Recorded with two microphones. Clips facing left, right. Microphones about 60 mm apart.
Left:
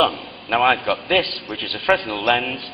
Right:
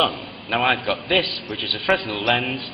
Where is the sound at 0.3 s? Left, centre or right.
Centre.